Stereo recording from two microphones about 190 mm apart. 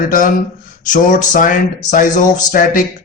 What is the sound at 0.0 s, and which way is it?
A man's voice, 45° left (ahead or behind).